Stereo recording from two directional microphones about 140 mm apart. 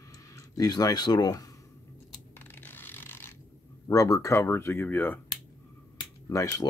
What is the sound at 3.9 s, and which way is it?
Speech, 25° left (ahead or behind).